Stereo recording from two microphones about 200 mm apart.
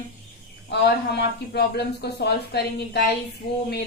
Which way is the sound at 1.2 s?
55° left (ahead or behind).